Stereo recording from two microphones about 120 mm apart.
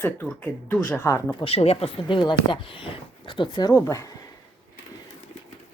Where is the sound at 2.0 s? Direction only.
40° left (ahead or behind); by 4.1 s 25° left (ahead or behind).